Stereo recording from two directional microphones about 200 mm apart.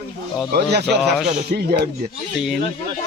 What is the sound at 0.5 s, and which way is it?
Speech, 55° right (ahead or behind).